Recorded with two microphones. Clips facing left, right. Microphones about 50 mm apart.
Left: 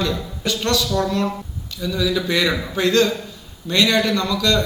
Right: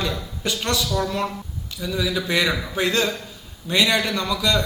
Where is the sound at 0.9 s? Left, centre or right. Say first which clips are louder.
Left 3 dB; centre.